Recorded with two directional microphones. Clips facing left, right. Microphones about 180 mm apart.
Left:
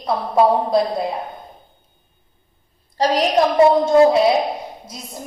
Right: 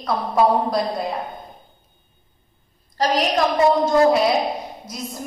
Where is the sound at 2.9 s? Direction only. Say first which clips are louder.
Left 3 dB; 30° left (ahead or behind).